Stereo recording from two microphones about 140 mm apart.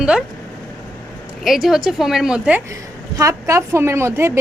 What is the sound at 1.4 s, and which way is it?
Speech, centre (ahead or behind).